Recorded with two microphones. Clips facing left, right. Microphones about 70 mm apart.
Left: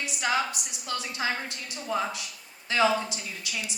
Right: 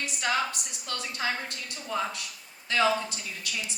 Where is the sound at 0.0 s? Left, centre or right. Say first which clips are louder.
Left 1 dB; centre.